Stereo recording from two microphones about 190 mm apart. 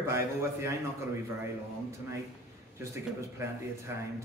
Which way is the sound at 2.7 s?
15° right (ahead or behind).